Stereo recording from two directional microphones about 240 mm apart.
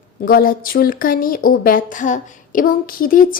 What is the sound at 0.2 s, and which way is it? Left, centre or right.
Speech, left.